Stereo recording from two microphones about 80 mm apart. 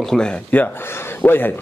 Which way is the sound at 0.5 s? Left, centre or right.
Left.